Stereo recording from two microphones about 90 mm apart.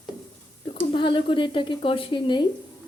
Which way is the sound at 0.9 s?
65° left (ahead or behind).